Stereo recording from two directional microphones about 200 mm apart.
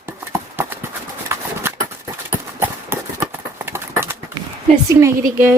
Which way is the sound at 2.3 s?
10° right (ahead or behind).